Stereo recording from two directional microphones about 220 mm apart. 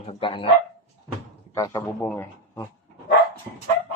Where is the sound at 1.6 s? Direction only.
10° left (ahead or behind).